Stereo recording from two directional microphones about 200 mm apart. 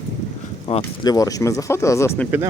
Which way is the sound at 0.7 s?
25° left (ahead or behind).